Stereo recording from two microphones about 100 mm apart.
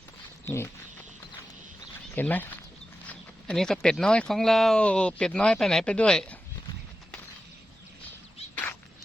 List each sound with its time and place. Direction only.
0.4 s speech: 25° left (ahead or behind)
2.1 s speech: 15° left (ahead or behind)
3.1 s speech: 5° left (ahead or behind)
8.5 s a sound: 15° left (ahead or behind)